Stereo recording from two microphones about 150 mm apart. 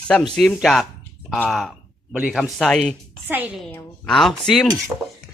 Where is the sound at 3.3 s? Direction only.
15° right (ahead or behind).